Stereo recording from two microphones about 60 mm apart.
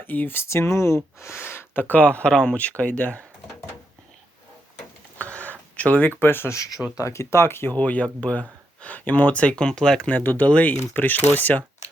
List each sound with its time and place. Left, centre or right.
0.0 s speech: left
0.4 s speech: left; by 3.2 s centre
5.1 s a sound: left
6.5 s speech: left
7.0 s speech: left
7.7 s speech: left
10.1 s speech: left